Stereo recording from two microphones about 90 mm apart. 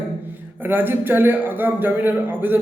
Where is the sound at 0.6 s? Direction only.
20° right (ahead or behind).